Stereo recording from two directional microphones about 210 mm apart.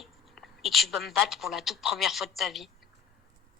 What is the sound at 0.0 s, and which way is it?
A woman's voice, centre (ahead or behind).